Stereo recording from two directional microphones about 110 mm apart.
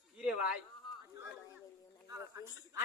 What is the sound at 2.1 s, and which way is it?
Speech, 30° right (ahead or behind).